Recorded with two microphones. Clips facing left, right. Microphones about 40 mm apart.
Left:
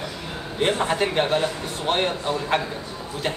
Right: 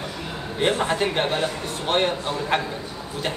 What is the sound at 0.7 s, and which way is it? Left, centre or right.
Speech, centre.